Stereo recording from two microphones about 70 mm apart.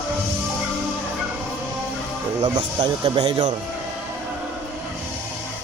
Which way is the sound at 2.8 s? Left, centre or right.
Right.